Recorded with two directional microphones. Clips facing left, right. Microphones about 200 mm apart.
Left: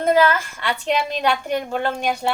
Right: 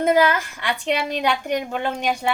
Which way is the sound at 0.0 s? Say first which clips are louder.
Left 1 dB; 15° right (ahead or behind).